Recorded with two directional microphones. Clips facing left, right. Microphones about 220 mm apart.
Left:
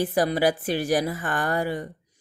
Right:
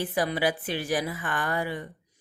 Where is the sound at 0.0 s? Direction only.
40° left (ahead or behind).